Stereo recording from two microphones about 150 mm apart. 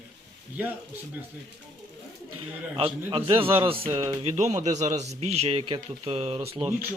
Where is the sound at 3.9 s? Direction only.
25° right (ahead or behind).